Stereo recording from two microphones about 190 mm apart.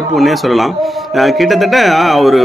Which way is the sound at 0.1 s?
Centre (ahead or behind).